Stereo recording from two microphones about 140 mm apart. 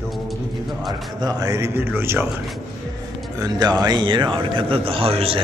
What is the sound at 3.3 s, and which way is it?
Speech, 25° right (ahead or behind).